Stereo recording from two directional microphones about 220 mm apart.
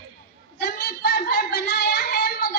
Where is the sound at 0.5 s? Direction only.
45° left (ahead or behind).